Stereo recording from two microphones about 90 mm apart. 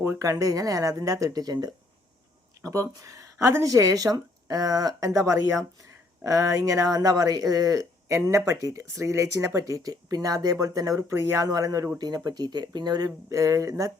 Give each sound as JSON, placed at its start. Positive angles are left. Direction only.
{"t": 0.0, "sound": "speech", "side_deg": -35}
{"t": 2.6, "sound": "speech", "side_deg": -35}